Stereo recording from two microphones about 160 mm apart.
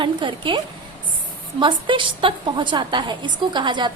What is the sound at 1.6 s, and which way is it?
A woman's voice, 30° right (ahead or behind).